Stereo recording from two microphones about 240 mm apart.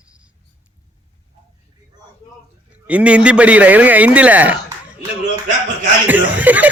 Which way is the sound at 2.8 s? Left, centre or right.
Centre.